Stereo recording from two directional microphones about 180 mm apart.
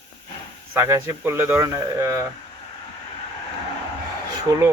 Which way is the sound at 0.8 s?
15° right (ahead or behind).